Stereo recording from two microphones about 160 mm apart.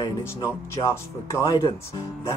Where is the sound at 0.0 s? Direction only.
15° left (ahead or behind).